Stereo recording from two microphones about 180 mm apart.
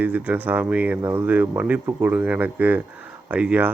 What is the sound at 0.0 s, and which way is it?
Speech, 10° right (ahead or behind).